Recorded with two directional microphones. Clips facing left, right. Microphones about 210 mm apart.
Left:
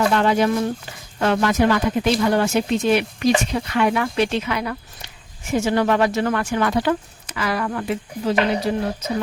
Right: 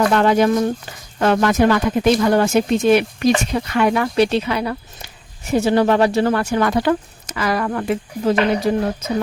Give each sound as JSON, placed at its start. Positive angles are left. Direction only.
{"t": 0.1, "sound": "speech", "side_deg": -50}